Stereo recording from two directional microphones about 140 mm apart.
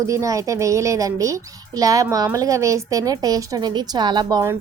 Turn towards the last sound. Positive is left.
turn(degrees=-30)  # may be behind; listen again after turning